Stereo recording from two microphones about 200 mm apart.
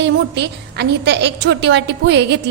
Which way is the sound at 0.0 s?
60° right (ahead or behind).